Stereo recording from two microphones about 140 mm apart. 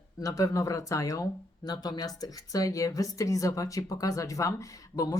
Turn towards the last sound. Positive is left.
turn(degrees=25)  # may be behind; listen again after turning